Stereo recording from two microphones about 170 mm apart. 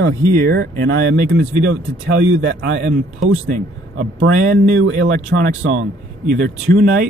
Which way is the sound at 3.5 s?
50° right (ahead or behind).